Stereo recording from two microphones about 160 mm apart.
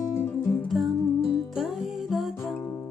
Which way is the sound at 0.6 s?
Centre (ahead or behind).